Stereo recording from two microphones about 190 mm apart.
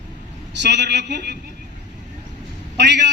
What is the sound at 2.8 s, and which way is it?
Speech, 65° right (ahead or behind).